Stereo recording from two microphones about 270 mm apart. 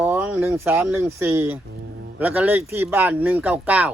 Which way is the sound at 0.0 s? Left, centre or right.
Centre.